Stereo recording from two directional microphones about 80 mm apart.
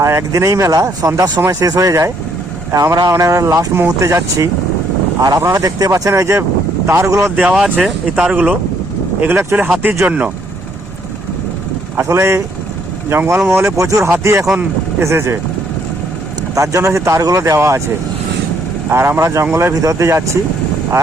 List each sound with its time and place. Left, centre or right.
0.0 s speech: right
7.5 s speech: centre
8.1 s speech: centre
9.2 s speech: right
10.1 s speech: centre
11.9 s speech: right
14.5 s speech: centre
15.0 s speech: right
16.6 s speech: right
18.9 s speech: right